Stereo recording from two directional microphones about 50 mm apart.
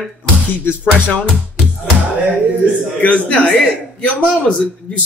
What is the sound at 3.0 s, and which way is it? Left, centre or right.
A man's voice, left.